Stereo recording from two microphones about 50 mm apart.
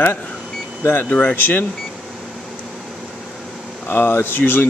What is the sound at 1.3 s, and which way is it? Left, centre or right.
Speech, left.